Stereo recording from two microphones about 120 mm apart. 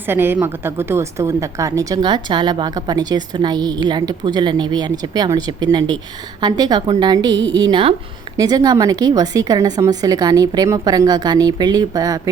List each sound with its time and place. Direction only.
0.1 s a woman's voice: 20° right (ahead or behind); by 7.9 s 45° right (ahead or behind)
8.4 s a woman's voice: 35° right (ahead or behind)